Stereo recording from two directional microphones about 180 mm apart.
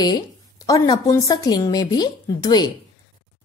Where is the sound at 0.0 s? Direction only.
20° left (ahead or behind).